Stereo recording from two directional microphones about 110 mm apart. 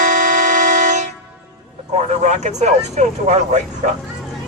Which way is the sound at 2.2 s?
90° right.